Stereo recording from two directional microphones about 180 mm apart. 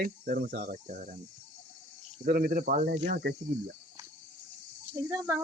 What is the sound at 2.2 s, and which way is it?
Speech, 55° right (ahead or behind).